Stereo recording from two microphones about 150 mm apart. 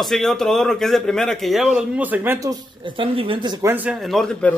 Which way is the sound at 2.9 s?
35° right (ahead or behind).